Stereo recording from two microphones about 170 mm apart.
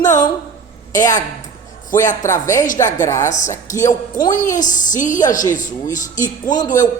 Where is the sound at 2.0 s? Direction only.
45° left (ahead or behind).